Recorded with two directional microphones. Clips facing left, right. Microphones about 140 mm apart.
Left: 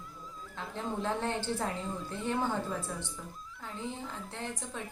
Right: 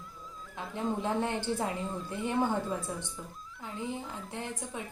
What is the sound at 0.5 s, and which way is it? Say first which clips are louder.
A woman's voice: right 3 dB; 15° right (ahead or behind).